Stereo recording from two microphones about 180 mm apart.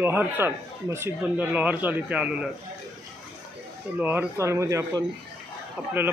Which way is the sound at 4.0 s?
10° right (ahead or behind).